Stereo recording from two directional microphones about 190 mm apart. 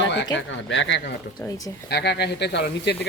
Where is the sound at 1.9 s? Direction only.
60° left (ahead or behind).